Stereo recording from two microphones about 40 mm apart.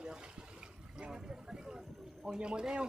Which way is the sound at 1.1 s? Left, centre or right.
Centre.